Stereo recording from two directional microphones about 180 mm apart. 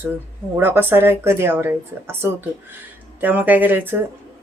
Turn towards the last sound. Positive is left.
turn(degrees=-10)  # may be behind; listen again after turning